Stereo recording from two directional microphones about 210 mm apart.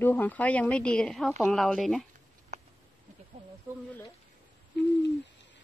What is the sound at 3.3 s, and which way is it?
Snake, 30° right (ahead or behind).